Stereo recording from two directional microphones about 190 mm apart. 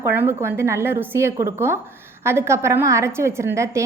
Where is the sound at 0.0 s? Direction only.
10° right (ahead or behind).